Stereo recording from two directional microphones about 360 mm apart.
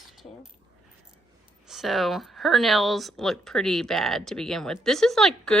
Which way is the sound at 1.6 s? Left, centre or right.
Centre.